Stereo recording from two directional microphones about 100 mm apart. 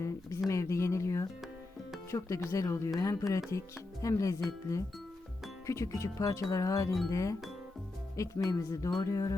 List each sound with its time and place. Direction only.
0.0 s music: 30° left (ahead or behind)
8.4 s music: 35° left (ahead or behind)